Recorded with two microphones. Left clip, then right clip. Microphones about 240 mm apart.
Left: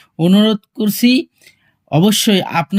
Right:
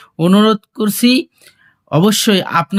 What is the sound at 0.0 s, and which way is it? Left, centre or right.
Speech, centre.